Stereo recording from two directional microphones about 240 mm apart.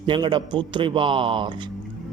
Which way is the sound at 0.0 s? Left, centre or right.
Right.